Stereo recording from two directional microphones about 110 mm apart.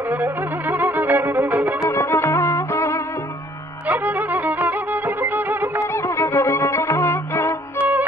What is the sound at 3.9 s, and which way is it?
Music, 15° right (ahead or behind).